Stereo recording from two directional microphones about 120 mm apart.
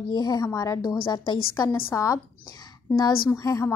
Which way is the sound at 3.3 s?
25° left (ahead or behind).